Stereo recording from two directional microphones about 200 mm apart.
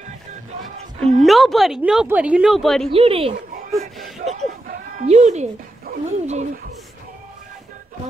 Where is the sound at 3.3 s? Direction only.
45° right (ahead or behind).